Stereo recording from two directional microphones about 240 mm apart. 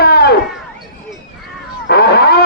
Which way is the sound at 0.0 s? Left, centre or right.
Left.